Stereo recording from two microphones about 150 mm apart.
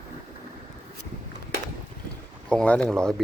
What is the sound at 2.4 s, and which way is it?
Speech, 5° left (ahead or behind).